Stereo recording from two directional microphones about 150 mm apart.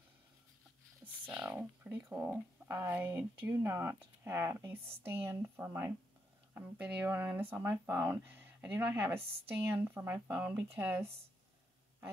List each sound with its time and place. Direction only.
1.2 s speech: 10° right (ahead or behind)